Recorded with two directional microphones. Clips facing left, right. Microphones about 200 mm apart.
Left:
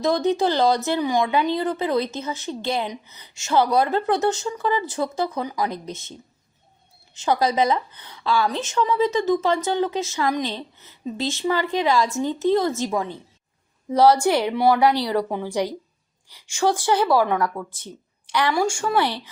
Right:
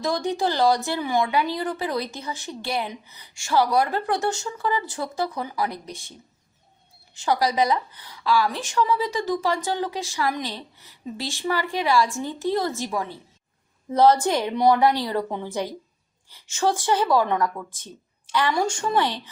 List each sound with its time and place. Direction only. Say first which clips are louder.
0.0 s a woman's voice: left 4 dB; 20° left (ahead or behind)